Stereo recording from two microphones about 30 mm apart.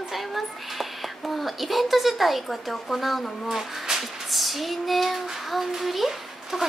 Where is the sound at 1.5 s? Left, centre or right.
Centre.